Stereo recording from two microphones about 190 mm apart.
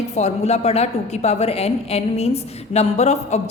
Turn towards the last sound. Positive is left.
turn(degrees=35)  # may be behind; listen again after turning